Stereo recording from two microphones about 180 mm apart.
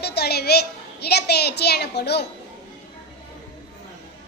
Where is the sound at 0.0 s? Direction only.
65° left (ahead or behind).